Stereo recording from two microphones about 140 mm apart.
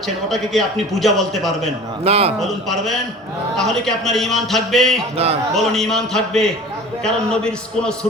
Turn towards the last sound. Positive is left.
turn(degrees=5)  # may be behind; listen again after turning